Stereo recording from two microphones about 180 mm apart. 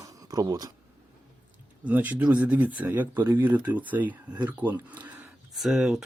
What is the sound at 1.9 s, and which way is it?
Speech, 10° right (ahead or behind).